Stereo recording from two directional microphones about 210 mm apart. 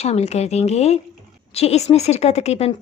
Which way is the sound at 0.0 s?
30° left (ahead or behind).